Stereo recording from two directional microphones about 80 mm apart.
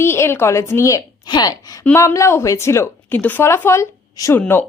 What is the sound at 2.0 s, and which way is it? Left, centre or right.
Speech, left.